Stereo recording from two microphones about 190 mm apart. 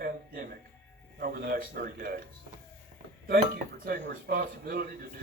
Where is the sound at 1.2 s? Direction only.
50° right (ahead or behind).